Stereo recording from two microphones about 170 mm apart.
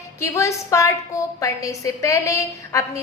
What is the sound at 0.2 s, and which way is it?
A woman's voice, 15° left (ahead or behind).